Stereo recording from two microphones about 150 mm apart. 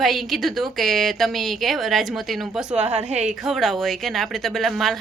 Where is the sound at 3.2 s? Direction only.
Centre (ahead or behind).